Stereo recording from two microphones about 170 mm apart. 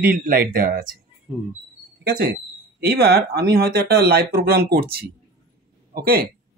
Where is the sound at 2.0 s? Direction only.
75° right (ahead or behind).